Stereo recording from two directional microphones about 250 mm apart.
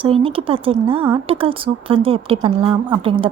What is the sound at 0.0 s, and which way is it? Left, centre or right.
Speech, right.